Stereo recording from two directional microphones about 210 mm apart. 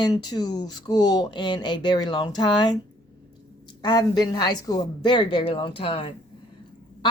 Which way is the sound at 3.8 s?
20° left (ahead or behind).